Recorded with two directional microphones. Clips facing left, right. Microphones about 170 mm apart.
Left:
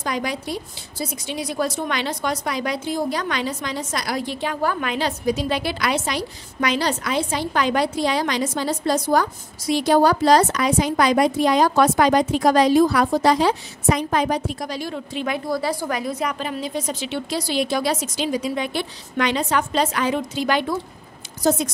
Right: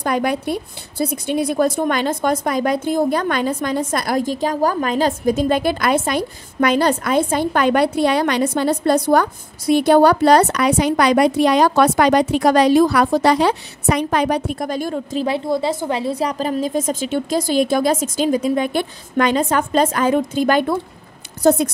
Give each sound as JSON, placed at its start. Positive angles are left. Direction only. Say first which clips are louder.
{"t": 0.0, "sound": "a woman's voice", "louder": "right 6 dB", "side_deg": -55}
{"t": 15.2, "sound": "a woman's voice", "louder": "right 3 dB", "side_deg": -25}